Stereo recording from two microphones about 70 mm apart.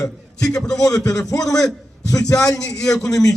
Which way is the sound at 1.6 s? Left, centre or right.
Left.